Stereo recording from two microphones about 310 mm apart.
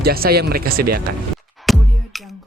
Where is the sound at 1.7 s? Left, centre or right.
Centre.